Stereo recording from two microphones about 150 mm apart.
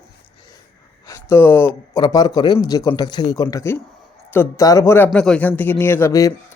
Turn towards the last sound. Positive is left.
turn(degrees=20)  # may be behind; listen again after turning